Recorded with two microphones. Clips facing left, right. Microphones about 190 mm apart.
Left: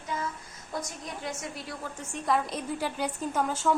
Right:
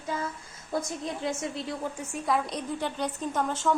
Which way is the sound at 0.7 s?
25° right (ahead or behind).